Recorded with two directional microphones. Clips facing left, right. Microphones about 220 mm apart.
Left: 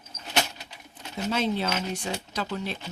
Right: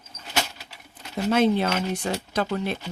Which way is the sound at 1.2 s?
55° right (ahead or behind).